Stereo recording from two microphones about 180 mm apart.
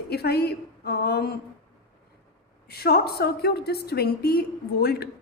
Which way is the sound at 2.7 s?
60° left (ahead or behind).